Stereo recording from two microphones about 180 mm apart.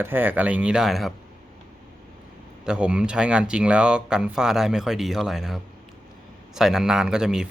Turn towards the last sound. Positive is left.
turn(degrees=-5)  # may be behind; listen again after turning